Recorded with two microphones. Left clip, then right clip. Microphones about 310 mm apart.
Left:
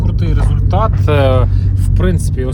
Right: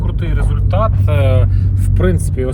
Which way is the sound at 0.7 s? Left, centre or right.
Left.